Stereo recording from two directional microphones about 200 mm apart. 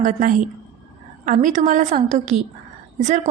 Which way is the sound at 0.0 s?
40° right (ahead or behind).